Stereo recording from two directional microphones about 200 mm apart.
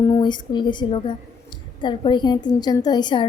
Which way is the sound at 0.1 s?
20° left (ahead or behind).